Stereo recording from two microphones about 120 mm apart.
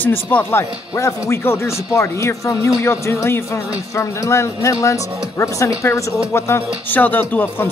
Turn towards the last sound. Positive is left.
turn(degrees=20)  # may be behind; listen again after turning